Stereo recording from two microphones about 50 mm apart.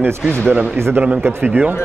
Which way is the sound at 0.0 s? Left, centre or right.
Right.